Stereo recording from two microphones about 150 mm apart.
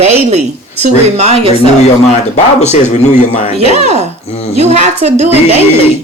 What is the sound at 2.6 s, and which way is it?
Speech, 50° left (ahead or behind).